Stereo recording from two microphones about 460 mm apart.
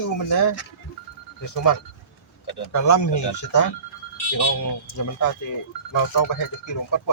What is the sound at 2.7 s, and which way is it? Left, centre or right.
Speech, left.